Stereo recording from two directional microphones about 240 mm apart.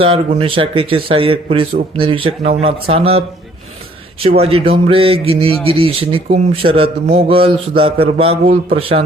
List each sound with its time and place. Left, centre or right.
0.0 s a man's voice: right